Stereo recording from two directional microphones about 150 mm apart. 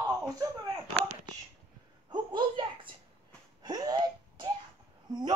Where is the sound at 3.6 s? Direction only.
25° right (ahead or behind).